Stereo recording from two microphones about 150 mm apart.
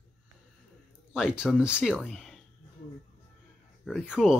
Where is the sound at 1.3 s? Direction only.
5° right (ahead or behind).